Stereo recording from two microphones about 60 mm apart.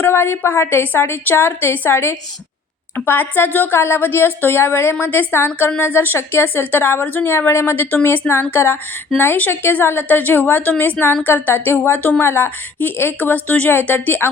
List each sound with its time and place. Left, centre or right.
0.0 s a woman's voice: left
7.3 s a woman's voice: left